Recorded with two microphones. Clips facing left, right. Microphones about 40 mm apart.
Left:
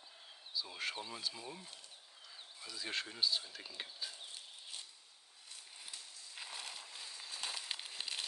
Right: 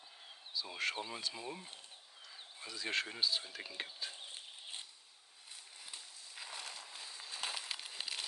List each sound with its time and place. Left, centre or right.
0.5 s speech: centre
0.9 s speech: centre
2.7 s speech: centre
3.5 s speech: centre
4.1 s a sound: right
6.3 s a sound: centre